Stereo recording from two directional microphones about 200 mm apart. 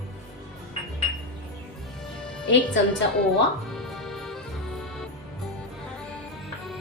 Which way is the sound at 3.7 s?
Centre (ahead or behind).